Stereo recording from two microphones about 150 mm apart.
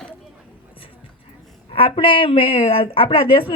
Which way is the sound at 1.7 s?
35° left (ahead or behind).